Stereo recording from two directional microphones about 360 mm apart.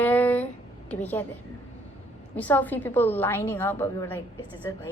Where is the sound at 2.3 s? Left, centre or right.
Centre.